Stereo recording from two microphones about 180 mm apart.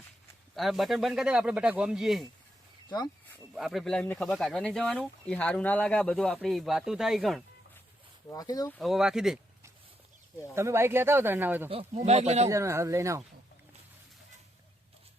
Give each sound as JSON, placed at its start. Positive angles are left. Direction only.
{"t": 0.5, "sound": "speech", "side_deg": 0}
{"t": 3.5, "sound": "speech", "side_deg": 0}
{"t": 8.3, "sound": "speech", "side_deg": 20}
{"t": 8.8, "sound": "speech", "side_deg": 0}
{"t": 10.5, "sound": "speech", "side_deg": -15}
{"t": 11.7, "sound": "speech", "side_deg": -35}
{"t": 12.5, "sound": "speech", "side_deg": -15}